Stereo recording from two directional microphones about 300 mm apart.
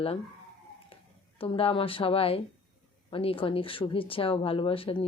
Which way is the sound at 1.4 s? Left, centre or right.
Centre.